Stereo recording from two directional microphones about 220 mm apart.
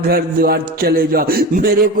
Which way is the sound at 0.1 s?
45° right (ahead or behind).